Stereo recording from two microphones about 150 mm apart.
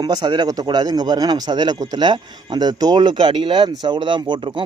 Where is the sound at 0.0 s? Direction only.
30° right (ahead or behind).